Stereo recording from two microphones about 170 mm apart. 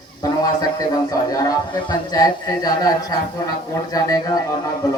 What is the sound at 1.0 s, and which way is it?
A man's voice, 20° left (ahead or behind).